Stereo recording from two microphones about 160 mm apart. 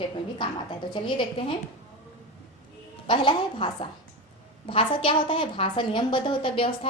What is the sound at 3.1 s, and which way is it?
A woman's voice, 30° left (ahead or behind).